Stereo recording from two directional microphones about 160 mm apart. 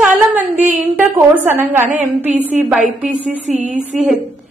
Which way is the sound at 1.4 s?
15° right (ahead or behind).